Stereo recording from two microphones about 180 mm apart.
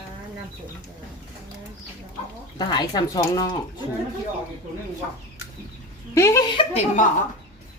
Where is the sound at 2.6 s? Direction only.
20° left (ahead or behind).